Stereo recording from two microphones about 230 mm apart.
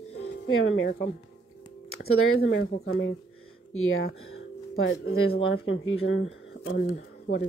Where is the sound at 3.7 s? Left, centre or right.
Left.